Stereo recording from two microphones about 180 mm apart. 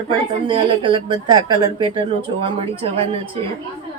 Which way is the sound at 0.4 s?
25° right (ahead or behind).